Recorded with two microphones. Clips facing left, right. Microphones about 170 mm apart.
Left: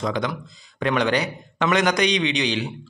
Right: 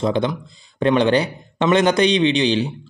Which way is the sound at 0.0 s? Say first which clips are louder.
Right 5 dB; 30° right (ahead or behind).